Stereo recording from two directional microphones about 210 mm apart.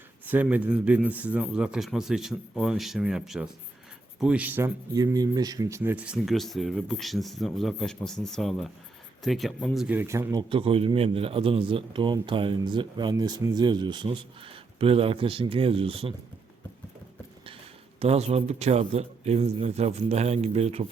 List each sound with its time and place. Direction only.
0.3 s speech: 10° right (ahead or behind)
10.5 s speech: 25° right (ahead or behind)
18.0 s speech: 30° right (ahead or behind)